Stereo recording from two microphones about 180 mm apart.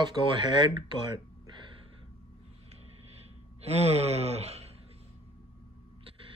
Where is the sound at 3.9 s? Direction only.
35° right (ahead or behind).